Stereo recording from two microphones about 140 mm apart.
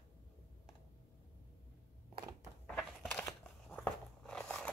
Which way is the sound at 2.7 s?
5° left (ahead or behind).